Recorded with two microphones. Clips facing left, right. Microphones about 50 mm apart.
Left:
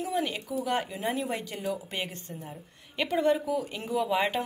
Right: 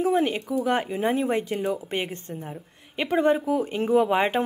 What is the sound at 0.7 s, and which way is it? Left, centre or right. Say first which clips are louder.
A woman's voice: right 6 dB; right.